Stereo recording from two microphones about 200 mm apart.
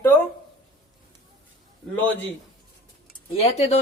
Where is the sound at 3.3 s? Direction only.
30° left (ahead or behind).